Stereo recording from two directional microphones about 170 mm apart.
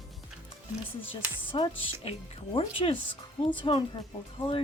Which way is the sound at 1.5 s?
30° left (ahead or behind).